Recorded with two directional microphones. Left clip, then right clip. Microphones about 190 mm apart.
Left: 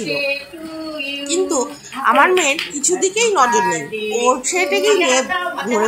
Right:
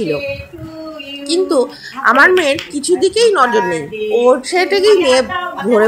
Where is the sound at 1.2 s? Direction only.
10° right (ahead or behind).